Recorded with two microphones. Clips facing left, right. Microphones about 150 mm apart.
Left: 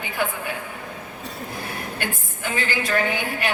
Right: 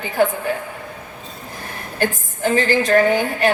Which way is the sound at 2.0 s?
40° right (ahead or behind).